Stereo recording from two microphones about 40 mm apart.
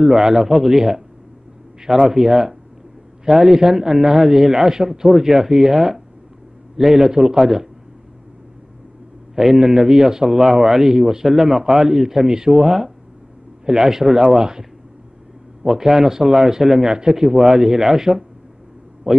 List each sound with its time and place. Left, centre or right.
0.0 s a man's voice: centre
2.0 s a man's voice: centre
9.3 s a man's voice: centre